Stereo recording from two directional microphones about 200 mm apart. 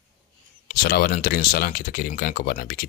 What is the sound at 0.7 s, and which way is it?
Speech, 50° left (ahead or behind).